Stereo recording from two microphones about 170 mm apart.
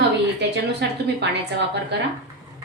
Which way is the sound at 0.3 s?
90° right.